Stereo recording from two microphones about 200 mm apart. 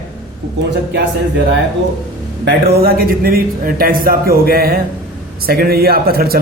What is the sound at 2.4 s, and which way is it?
A man's voice, 55° right (ahead or behind).